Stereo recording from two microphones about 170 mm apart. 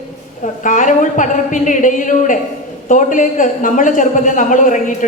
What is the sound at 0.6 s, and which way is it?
A man's voice, 50° left (ahead or behind).